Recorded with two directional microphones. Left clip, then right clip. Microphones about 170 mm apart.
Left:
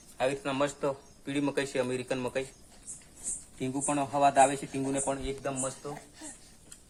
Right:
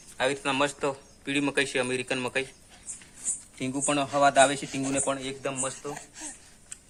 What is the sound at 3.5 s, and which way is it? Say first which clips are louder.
Speech: right 3 dB; 45° right (ahead or behind).